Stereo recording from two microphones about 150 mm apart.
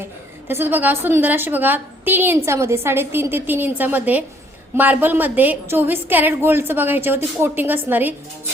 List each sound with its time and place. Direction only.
0.4 s a woman's voice: 15° right (ahead or behind)